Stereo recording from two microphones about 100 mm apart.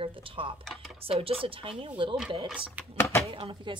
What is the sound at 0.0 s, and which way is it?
Speech, 60° right (ahead or behind).